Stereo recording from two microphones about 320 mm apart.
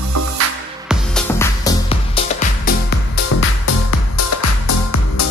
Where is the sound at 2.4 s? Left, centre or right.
Left.